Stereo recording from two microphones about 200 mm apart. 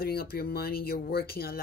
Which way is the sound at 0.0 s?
50° left (ahead or behind).